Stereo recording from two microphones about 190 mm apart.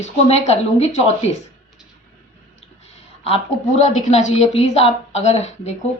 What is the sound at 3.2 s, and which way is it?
A woman's voice, 35° left (ahead or behind).